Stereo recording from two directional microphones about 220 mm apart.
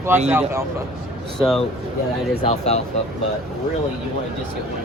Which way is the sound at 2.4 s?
30° left (ahead or behind).